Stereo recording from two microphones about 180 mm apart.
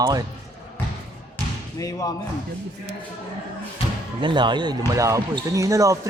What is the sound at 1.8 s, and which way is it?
Speech, 20° left (ahead or behind).